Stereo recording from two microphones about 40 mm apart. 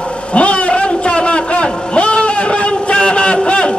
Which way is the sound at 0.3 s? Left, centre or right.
Left.